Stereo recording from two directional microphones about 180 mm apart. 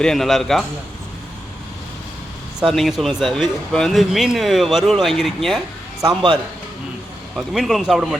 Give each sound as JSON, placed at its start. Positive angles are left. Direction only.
{"t": 0.0, "sound": "speech", "side_deg": 0}
{"t": 2.7, "sound": "speech", "side_deg": 0}
{"t": 6.0, "sound": "a man's voice", "side_deg": -25}
{"t": 7.3, "sound": "speech", "side_deg": 0}